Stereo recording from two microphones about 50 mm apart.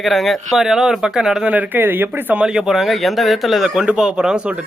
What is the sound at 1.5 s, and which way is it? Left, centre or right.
Speech, right.